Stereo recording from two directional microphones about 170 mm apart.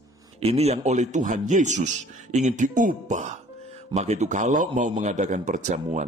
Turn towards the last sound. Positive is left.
turn(degrees=-45)  # may be behind; listen again after turning